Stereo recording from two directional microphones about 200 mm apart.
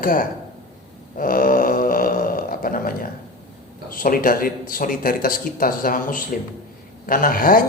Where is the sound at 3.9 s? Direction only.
45° left (ahead or behind).